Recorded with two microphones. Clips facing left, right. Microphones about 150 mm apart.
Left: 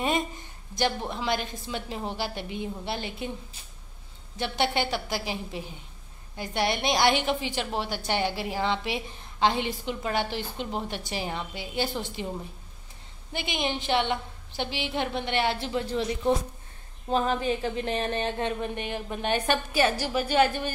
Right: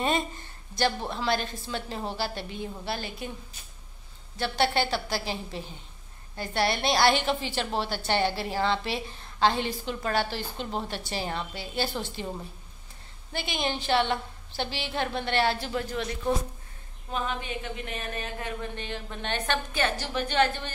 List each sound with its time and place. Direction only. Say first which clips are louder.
0.7 s a woman's voice: even; 15° left (ahead or behind)
4.4 s a woman's voice: right 1 dB; 20° left (ahead or behind)
13.3 s a woman's voice: left 1 dB; 15° left (ahead or behind)
17.1 s speech: left 7 dB; 35° left (ahead or behind)
18.8 s a woman's voice: left 4 dB; 15° left (ahead or behind)